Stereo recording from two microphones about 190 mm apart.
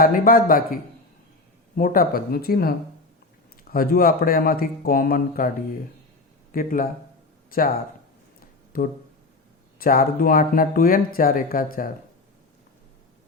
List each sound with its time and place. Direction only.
0.0 s speech: 50° left (ahead or behind)
6.5 s speech: 45° left (ahead or behind)
8.7 s speech: 50° left (ahead or behind)